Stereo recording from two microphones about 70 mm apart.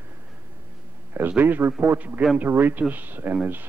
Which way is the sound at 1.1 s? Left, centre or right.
Right.